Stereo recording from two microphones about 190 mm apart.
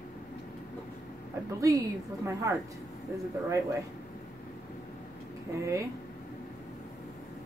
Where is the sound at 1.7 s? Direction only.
20° right (ahead or behind).